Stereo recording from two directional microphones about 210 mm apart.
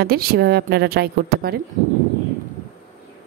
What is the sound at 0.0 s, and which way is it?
A woman's voice, 45° right (ahead or behind).